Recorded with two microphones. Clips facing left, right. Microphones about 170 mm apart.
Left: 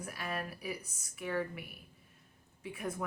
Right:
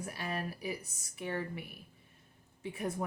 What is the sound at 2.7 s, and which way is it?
Speech, 35° right (ahead or behind).